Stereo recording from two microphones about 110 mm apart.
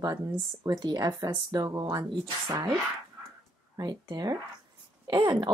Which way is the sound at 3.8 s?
35° right (ahead or behind).